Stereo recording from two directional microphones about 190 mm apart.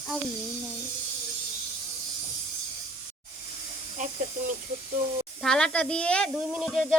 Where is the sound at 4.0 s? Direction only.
40° right (ahead or behind).